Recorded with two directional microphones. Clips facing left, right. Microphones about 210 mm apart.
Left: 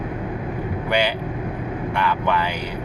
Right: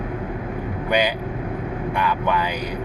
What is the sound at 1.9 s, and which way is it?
Speech, 15° right (ahead or behind).